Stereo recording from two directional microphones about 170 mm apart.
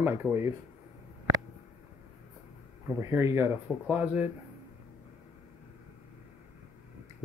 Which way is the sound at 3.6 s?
5° right (ahead or behind).